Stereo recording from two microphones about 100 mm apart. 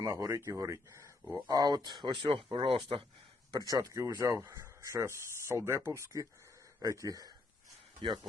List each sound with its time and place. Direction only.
0.0 s speech: 30° right (ahead or behind)
1.5 s speech: 40° right (ahead or behind)
2.5 s speech: 60° right (ahead or behind)
3.5 s speech: 40° right (ahead or behind)